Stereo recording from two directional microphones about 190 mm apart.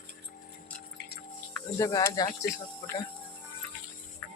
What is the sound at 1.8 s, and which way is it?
Speech, 20° left (ahead or behind).